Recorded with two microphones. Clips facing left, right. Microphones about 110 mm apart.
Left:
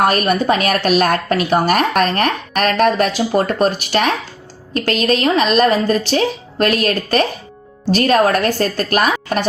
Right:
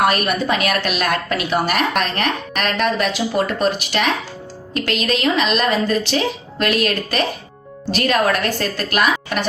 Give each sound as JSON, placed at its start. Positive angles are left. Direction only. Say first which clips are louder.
{"t": 0.0, "sound": "speech", "louder": "left 3 dB", "side_deg": 40}